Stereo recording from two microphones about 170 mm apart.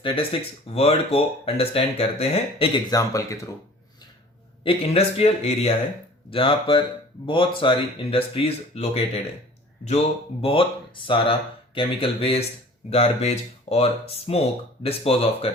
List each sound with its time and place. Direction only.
0.3 s speech: 30° left (ahead or behind)
2.9 s speech: 20° left (ahead or behind)
4.6 s speech: 35° left (ahead or behind)
10.4 s speech: 30° left (ahead or behind)